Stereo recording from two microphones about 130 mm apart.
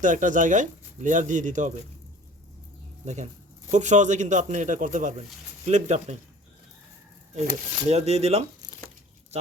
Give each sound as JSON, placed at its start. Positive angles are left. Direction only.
{"t": 0.0, "sound": "speech", "side_deg": -80}
{"t": 3.0, "sound": "speech", "side_deg": -65}
{"t": 7.3, "sound": "speech", "side_deg": -60}